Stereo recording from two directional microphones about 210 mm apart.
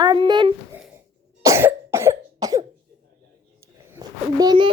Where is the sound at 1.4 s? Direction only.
10° right (ahead or behind).